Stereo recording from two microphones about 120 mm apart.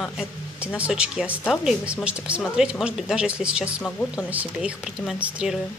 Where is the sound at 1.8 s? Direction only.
10° right (ahead or behind).